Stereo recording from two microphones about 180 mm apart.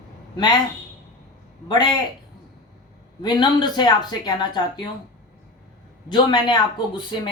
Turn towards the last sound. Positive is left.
turn(degrees=25)  # may be behind; listen again after turning